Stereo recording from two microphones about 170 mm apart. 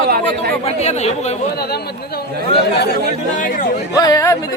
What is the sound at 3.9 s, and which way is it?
Speech, 20° left (ahead or behind).